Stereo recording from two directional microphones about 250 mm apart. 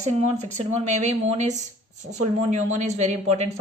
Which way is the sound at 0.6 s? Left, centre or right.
Right.